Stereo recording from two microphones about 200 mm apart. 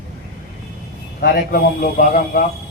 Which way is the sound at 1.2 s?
50° left (ahead or behind).